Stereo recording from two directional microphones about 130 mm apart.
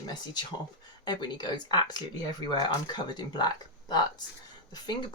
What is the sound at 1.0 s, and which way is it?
Speech, 35° left (ahead or behind).